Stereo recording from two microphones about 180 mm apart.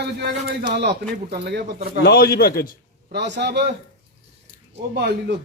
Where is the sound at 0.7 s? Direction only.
65° right (ahead or behind).